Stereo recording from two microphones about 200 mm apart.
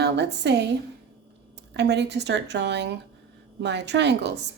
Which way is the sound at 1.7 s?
55° right (ahead or behind).